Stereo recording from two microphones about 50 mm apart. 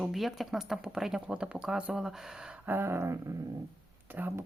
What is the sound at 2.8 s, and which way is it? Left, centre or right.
Dog, right.